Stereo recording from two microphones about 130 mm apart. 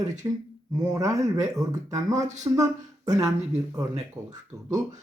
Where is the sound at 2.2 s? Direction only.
65° right (ahead or behind).